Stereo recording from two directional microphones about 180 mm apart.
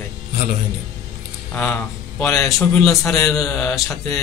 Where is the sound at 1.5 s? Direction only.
5° left (ahead or behind).